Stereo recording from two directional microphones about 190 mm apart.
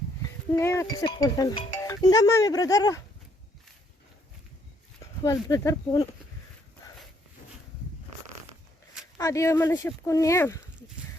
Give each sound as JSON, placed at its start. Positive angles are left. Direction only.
{"t": 0.2, "sound": "speech", "side_deg": 15}
{"t": 5.2, "sound": "speech", "side_deg": 20}
{"t": 9.1, "sound": "speech", "side_deg": 15}